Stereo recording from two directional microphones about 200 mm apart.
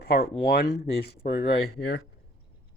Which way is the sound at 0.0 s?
50° left (ahead or behind).